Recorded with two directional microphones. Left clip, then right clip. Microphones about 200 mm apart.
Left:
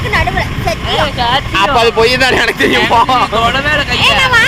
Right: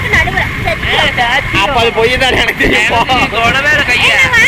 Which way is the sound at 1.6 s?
20° left (ahead or behind).